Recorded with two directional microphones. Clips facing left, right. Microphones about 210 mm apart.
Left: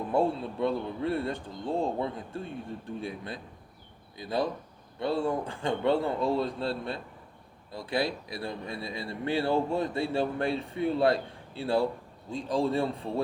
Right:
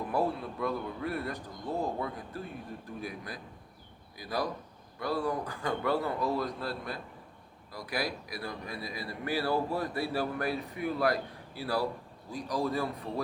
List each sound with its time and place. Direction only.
0.1 s a man's voice: 25° left (ahead or behind)